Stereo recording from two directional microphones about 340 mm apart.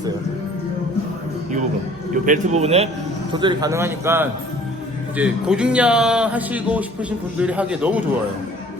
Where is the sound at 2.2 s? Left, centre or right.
Right; by 8.0 s centre.